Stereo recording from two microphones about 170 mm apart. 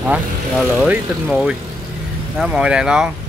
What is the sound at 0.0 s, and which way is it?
Speech, 5° right (ahead or behind).